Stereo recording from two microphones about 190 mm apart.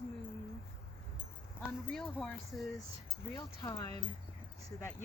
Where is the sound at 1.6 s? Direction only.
Centre (ahead or behind).